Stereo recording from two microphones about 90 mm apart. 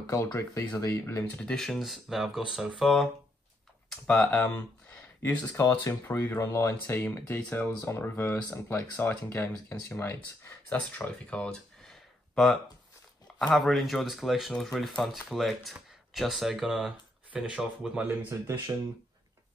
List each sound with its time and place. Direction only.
0.1 s speech: 35° left (ahead or behind)
1.3 s speech: 10° left (ahead or behind)
3.9 s speech: 10° left (ahead or behind)
4.9 s a sound: 15° left (ahead or behind)
5.6 s speech: 30° left (ahead or behind); by 18.0 s 10° right (ahead or behind)